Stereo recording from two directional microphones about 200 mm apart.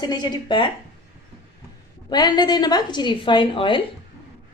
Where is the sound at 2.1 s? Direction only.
20° left (ahead or behind).